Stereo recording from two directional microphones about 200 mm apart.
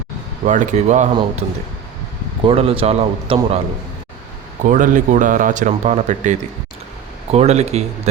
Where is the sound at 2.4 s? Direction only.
30° right (ahead or behind).